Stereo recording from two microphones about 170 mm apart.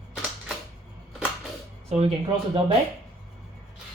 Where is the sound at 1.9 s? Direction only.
35° right (ahead or behind).